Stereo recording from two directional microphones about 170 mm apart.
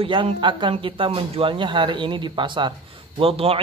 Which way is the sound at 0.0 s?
30° right (ahead or behind).